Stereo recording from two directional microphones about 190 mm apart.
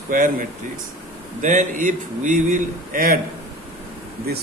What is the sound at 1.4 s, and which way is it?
A man's voice, 40° right (ahead or behind).